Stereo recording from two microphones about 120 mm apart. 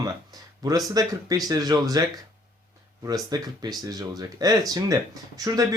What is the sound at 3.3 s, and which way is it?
Speech, 30° right (ahead or behind).